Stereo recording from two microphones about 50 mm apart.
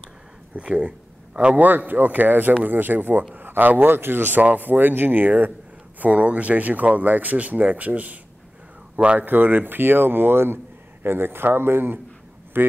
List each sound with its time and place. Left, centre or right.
0.6 s speech: right
1.6 s a man's voice: right
9.2 s a man's voice: right